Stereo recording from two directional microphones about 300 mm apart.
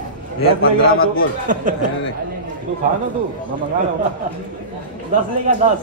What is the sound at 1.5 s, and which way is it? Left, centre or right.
Speech, right.